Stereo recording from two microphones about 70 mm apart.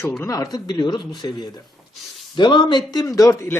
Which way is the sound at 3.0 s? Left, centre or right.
Left.